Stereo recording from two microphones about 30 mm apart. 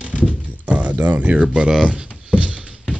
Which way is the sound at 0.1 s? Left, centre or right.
Right.